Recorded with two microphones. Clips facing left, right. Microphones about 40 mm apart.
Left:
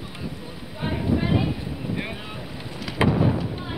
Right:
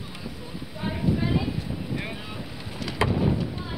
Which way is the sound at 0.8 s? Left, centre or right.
Centre.